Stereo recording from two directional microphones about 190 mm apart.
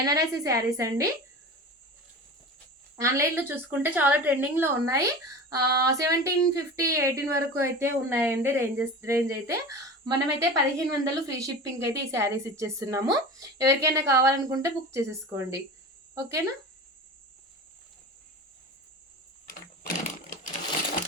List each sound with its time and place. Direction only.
0.1 s a woman's voice: 15° right (ahead or behind)
2.9 s a woman's voice: 15° right (ahead or behind)
20.1 s sewing machine: 45° left (ahead or behind)